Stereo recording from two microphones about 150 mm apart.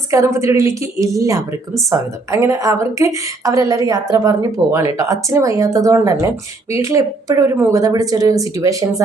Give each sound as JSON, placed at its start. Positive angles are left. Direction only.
{"t": 0.1, "sound": "speech", "side_deg": -20}